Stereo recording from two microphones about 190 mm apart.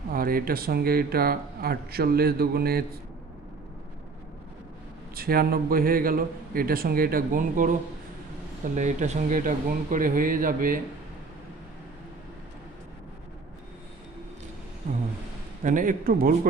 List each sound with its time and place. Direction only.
0.1 s speech: 50° right (ahead or behind)
5.1 s speech: 50° right (ahead or behind)
15.6 s speech: 45° right (ahead or behind)